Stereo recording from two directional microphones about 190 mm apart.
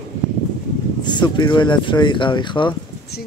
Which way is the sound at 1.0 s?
25° left (ahead or behind).